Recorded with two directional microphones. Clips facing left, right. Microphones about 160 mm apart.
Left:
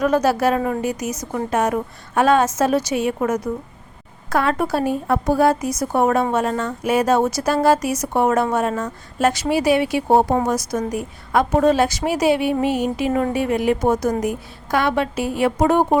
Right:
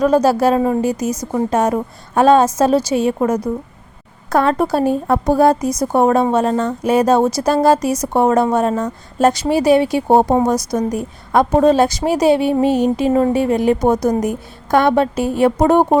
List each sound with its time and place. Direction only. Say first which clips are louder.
0.0 s a woman's voice: right 4 dB; 30° right (ahead or behind)